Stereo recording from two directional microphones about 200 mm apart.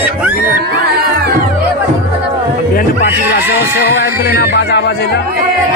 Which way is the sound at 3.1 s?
50° left (ahead or behind).